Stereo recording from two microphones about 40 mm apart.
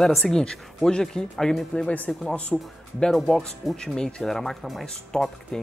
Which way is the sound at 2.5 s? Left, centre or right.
Centre.